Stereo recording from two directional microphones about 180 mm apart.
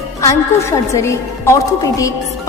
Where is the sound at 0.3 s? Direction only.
15° left (ahead or behind).